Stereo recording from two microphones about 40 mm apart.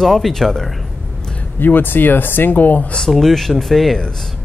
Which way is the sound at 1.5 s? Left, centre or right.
Left.